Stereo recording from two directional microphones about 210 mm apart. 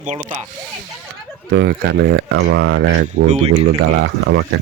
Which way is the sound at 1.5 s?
55° right (ahead or behind).